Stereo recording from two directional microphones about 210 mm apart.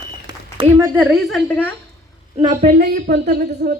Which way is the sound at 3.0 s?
50° right (ahead or behind).